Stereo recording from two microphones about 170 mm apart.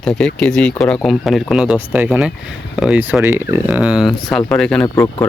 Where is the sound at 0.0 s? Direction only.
5° left (ahead or behind).